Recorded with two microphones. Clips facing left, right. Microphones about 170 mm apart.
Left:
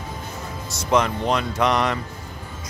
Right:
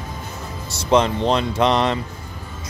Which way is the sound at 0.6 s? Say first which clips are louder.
Right 3 dB; 30° right (ahead or behind).